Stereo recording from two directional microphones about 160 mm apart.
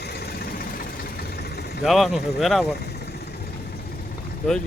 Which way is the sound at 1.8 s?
Centre (ahead or behind).